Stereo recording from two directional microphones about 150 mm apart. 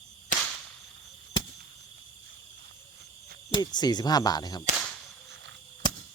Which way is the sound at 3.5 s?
30° left (ahead or behind).